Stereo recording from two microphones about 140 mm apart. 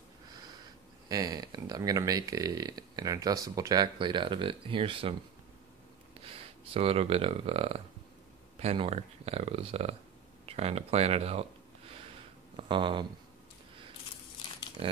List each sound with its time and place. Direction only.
1.0 s speech: 30° right (ahead or behind)
6.2 s speech: 40° right (ahead or behind)
12.5 s speech: 35° right (ahead or behind)